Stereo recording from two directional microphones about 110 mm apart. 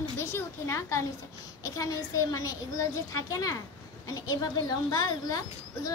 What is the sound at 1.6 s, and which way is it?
A child's voice, 35° left (ahead or behind).